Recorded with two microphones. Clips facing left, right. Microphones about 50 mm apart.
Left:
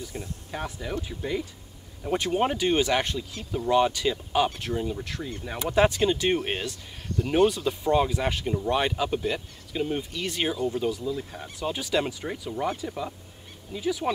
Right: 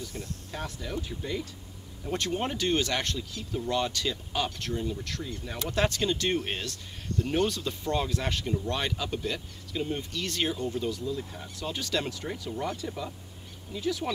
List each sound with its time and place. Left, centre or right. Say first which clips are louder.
0.0 s speech: left 2 dB; centre
7.2 s speech: left 5 dB; left
7.4 s speech: left 7 dB; centre